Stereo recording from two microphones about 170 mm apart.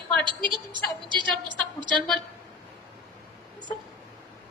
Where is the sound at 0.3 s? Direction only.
30° right (ahead or behind).